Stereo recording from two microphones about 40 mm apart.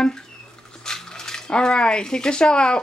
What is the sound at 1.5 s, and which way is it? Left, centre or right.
Speech, left.